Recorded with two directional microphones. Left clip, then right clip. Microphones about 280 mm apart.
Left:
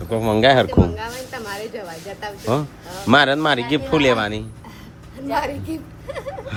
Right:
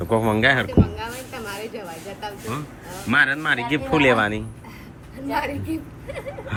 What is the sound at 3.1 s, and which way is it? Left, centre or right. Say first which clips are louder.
Speech: left 4 dB; centre.